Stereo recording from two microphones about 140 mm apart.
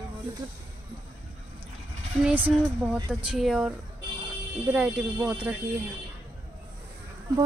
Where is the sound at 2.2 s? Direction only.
15° right (ahead or behind).